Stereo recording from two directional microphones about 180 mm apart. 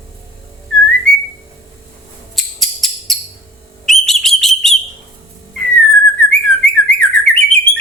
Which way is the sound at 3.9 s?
Centre (ahead or behind).